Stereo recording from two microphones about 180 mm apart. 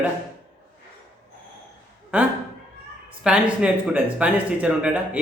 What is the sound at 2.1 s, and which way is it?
A man's voice, 10° right (ahead or behind).